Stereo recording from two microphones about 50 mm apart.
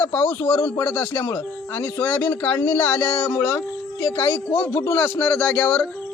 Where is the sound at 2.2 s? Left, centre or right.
Left.